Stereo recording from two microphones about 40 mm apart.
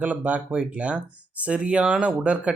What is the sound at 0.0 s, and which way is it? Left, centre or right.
Speech, right.